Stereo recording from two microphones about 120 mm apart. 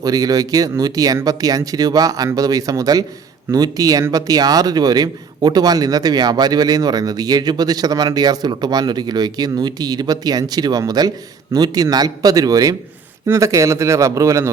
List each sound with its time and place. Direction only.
0.0 s a man's voice: 30° right (ahead or behind)